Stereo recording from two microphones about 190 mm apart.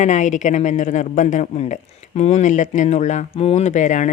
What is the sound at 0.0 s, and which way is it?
Speech, 40° left (ahead or behind).